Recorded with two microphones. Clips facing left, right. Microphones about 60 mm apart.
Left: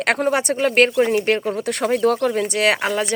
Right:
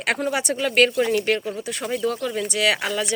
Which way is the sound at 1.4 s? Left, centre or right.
Left.